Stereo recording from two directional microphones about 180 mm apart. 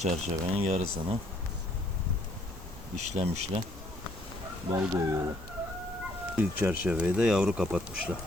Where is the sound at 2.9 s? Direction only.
40° right (ahead or behind).